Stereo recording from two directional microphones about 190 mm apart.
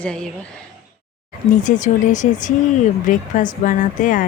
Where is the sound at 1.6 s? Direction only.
40° left (ahead or behind).